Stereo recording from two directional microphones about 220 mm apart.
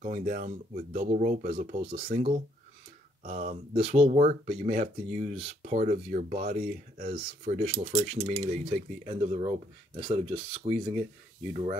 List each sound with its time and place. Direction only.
0.0 s speech: 35° right (ahead or behind)